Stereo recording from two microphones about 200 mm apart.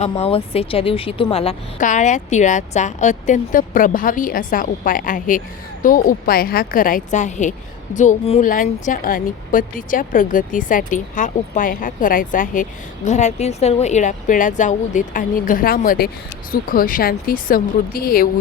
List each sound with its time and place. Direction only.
0.0 s a woman's voice: 30° left (ahead or behind); by 18.3 s 45° left (ahead or behind)